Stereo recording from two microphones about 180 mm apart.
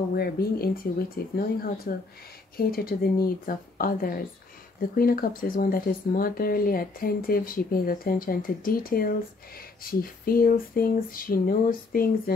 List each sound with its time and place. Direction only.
0.1 s speech: 60° left (ahead or behind)